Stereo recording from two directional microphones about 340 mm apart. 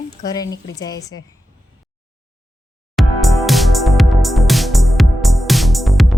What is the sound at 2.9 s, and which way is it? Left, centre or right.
Music, centre.